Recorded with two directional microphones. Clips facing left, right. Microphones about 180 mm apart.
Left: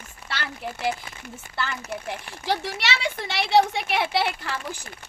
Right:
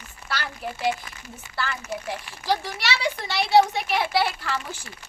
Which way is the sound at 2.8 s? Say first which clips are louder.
Right 1 dB; 25° left (ahead or behind).